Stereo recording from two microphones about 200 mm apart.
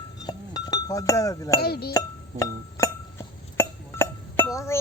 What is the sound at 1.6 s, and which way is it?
Speech, 50° left (ahead or behind).